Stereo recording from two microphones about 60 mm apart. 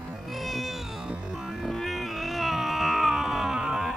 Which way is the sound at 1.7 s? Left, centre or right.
Centre.